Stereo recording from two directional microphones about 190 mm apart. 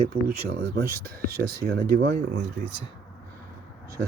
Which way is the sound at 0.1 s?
55° right (ahead or behind).